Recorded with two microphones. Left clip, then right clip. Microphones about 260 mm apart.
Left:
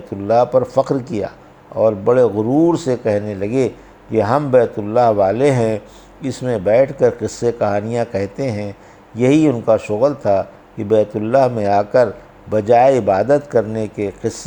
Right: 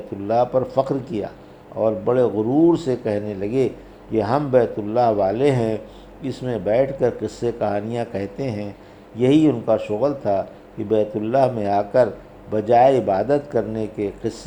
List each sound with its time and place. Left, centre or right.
0.3 s a man's voice: left